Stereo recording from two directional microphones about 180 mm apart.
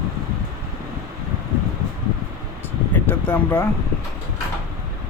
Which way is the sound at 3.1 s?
10° left (ahead or behind).